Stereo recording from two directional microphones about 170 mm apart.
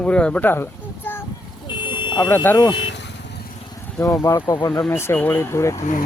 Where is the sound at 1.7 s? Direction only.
25° left (ahead or behind).